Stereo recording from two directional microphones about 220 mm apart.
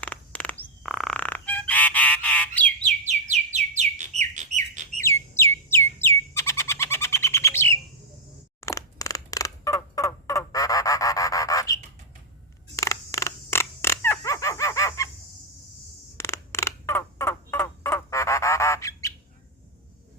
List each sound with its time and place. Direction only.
0.0 s goose: 5° left (ahead or behind)
2.8 s bird: 30° right (ahead or behind)
5.0 s bird: 10° left (ahead or behind)
8.6 s a sound: 15° left (ahead or behind)
12.7 s creak: 15° left (ahead or behind)
16.1 s turkey: 10° left (ahead or behind)